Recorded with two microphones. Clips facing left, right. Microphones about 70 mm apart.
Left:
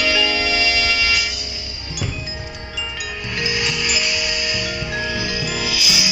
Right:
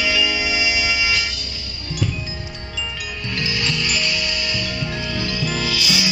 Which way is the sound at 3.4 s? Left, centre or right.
Centre.